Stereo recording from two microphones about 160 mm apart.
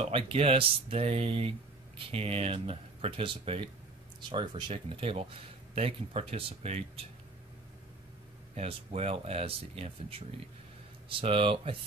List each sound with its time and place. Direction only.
0.0 s speech: 35° right (ahead or behind)
8.5 s speech: 40° right (ahead or behind)